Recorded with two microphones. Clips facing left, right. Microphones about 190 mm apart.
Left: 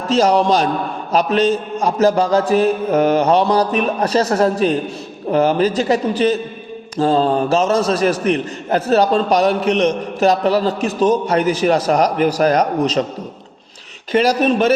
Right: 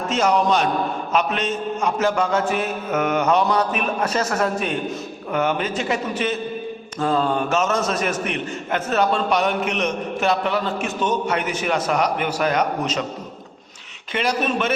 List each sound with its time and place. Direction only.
0.1 s a man's voice: 35° left (ahead or behind)
14.1 s a man's voice: 40° left (ahead or behind)